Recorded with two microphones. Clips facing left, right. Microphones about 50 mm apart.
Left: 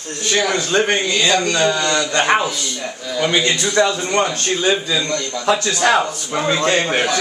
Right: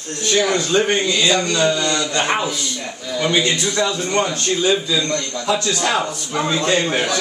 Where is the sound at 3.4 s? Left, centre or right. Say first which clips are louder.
Left 4 dB; left.